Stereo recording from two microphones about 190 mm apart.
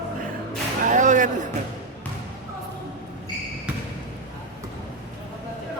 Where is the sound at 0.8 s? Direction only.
40° right (ahead or behind).